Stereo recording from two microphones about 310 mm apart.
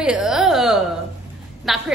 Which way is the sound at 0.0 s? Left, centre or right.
Centre.